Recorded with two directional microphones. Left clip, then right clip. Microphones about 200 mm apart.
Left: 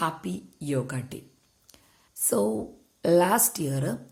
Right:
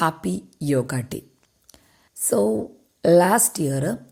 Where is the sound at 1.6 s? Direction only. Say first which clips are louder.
Right 4 dB; 20° right (ahead or behind).